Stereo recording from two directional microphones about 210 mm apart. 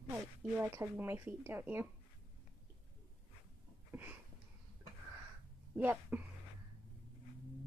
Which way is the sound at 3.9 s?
10° right (ahead or behind).